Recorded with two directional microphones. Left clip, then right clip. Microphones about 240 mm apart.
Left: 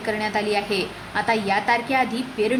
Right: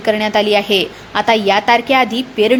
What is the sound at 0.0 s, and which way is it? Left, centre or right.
A woman's voice, right.